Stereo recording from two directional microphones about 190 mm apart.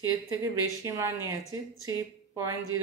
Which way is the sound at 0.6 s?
15° right (ahead or behind).